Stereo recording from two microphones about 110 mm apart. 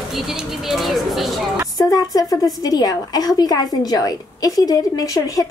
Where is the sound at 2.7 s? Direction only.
35° left (ahead or behind).